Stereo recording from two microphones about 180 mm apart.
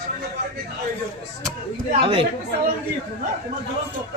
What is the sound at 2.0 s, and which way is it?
Speech, 30° right (ahead or behind).